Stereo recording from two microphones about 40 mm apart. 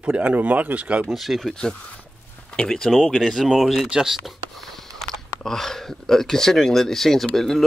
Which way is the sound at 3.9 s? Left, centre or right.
Centre.